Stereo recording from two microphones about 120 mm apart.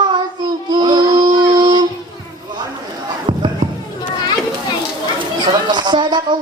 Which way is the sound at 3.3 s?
40° right (ahead or behind).